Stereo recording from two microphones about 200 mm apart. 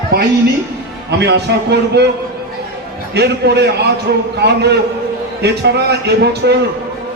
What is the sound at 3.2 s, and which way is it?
A man's voice, 55° right (ahead or behind).